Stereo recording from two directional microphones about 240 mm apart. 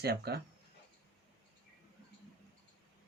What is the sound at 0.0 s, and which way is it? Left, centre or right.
Speech, right.